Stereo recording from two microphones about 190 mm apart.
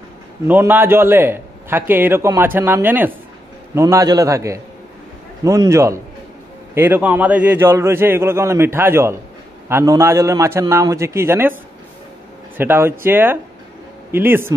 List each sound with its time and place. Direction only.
0.5 s a man's voice: 10° right (ahead or behind)
12.5 s a man's voice: 10° right (ahead or behind)